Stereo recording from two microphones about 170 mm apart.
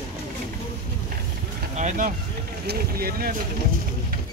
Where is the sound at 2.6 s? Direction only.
60° right (ahead or behind).